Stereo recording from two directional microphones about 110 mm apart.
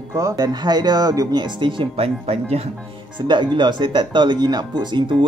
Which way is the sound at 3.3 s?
45° right (ahead or behind).